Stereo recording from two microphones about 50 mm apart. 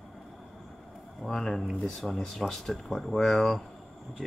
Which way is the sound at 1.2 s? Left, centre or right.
Centre.